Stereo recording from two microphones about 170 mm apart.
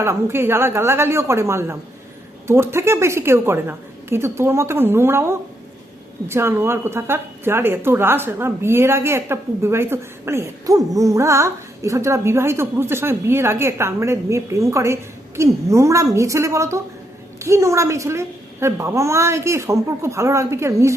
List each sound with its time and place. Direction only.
0.0 s a woman's voice: 15° right (ahead or behind)